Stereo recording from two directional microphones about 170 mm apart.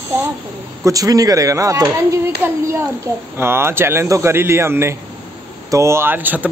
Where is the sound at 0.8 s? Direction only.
20° right (ahead or behind).